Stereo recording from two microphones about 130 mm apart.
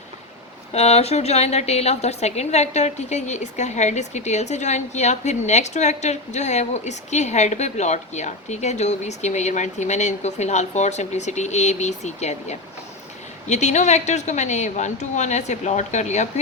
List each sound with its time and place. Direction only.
0.7 s a woman's voice: 55° left (ahead or behind)